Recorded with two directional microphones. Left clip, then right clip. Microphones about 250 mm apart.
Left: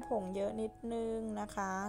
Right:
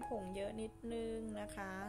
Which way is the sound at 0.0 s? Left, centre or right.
Centre.